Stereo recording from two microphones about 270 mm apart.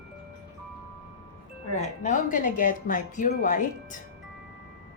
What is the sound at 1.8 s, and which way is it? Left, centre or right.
Speech, left.